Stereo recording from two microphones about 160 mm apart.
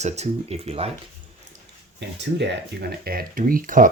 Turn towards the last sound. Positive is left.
turn(degrees=-55)  # may be behind; listen again after turning